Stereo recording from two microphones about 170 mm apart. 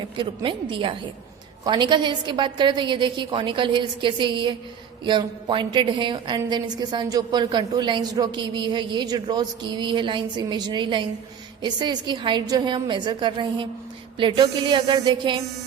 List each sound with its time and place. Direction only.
0.2 s a woman's voice: 30° right (ahead or behind)